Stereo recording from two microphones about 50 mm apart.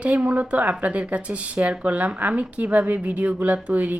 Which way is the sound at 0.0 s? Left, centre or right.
Right.